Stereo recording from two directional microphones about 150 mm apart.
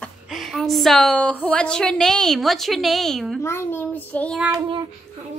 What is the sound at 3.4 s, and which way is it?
A child's voice, 15° left (ahead or behind).